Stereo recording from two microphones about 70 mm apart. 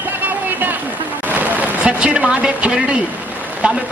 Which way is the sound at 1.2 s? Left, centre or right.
Right.